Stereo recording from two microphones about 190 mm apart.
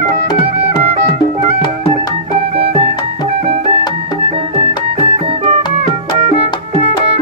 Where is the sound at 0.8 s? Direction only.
35° right (ahead or behind).